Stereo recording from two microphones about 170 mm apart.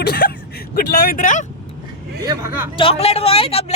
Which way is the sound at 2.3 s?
15° right (ahead or behind).